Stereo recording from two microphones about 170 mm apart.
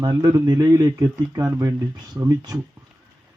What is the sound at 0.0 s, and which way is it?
Speech, 20° right (ahead or behind).